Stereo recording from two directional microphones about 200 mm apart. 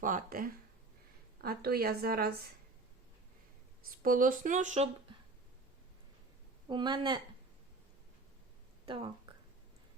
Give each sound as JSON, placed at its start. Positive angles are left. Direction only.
{"t": 0.0, "sound": "a woman's voice", "side_deg": -45}
{"t": 3.8, "sound": "speech", "side_deg": -45}
{"t": 6.7, "sound": "speech", "side_deg": -25}